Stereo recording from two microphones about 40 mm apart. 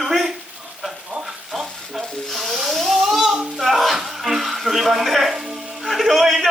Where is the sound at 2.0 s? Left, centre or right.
Centre.